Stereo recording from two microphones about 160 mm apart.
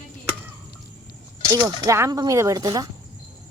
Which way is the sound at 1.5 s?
20° right (ahead or behind).